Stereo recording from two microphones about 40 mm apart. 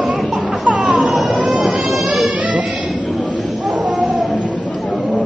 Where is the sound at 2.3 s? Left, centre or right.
Right.